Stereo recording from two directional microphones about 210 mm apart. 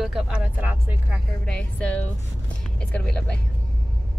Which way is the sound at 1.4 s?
5° left (ahead or behind).